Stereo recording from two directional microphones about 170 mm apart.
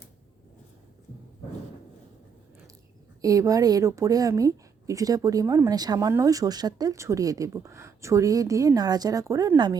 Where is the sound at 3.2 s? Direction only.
20° right (ahead or behind).